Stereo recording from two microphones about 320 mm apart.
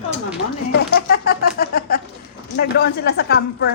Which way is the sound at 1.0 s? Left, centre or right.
Left.